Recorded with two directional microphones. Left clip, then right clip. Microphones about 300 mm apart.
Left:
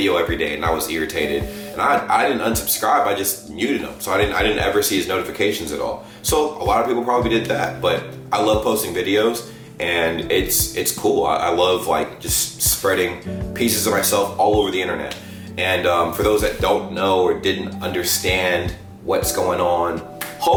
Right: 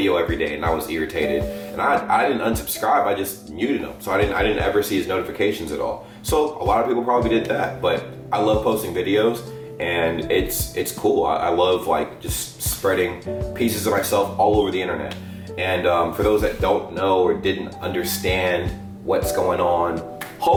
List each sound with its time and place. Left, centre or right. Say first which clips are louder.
0.0 s speech: left 1 dB; centre
6.9 s speech: left 1 dB; centre
7.3 s speech: left 1 dB; centre
8.4 s speech: left 1 dB; right
8.7 s speech: left 1 dB; centre
11.0 s speech: left 1 dB; right
11.3 s speech: left 1 dB; centre
14.3 s speech: left 1 dB; right
14.6 s speech: left 2 dB; centre